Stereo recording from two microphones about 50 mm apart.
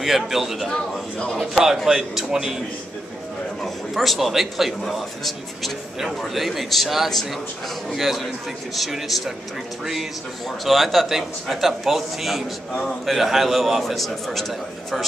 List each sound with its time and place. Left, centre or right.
0.0 s a man's voice: centre
0.7 s a man's voice: centre
1.9 s speech: centre
3.6 s a man's voice: centre
10.6 s a man's voice: centre